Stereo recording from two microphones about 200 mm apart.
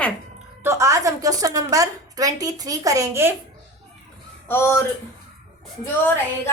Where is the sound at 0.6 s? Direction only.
15° right (ahead or behind).